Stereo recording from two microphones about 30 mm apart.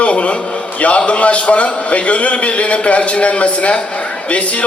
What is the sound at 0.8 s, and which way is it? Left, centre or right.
A man's voice, left.